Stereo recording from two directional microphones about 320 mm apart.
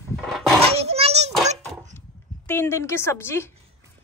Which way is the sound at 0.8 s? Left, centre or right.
Centre.